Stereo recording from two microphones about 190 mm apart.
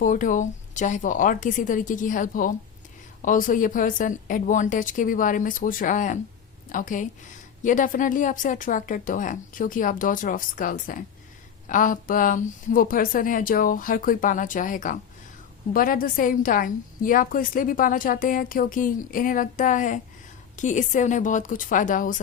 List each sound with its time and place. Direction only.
0.0 s a woman's voice: 45° left (ahead or behind)